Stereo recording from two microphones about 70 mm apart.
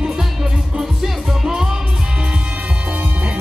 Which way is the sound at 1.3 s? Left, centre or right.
Centre.